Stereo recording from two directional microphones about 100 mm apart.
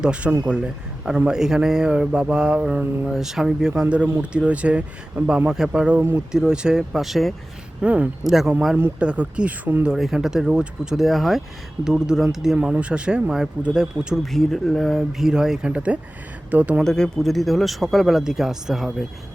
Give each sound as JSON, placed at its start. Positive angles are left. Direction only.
{"t": 0.0, "sound": "mantra", "side_deg": -10}
{"t": 0.4, "sound": "a man's voice", "side_deg": -10}
{"t": 1.3, "sound": "mantra", "side_deg": -5}
{"t": 6.0, "sound": "speech", "side_deg": -20}
{"t": 6.3, "sound": "speech", "side_deg": -5}
{"t": 7.8, "sound": "mantra", "side_deg": -15}
{"t": 8.7, "sound": "mantra", "side_deg": -15}
{"t": 9.9, "sound": "speech", "side_deg": -5}
{"t": 12.5, "sound": "mantra", "side_deg": -15}
{"t": 13.7, "sound": "speech", "side_deg": -5}
{"t": 16.5, "sound": "mantra", "side_deg": -15}
{"t": 16.8, "sound": "speech", "side_deg": 5}